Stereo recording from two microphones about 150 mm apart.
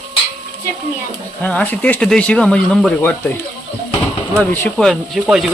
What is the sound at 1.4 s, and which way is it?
Speech, 10° left (ahead or behind).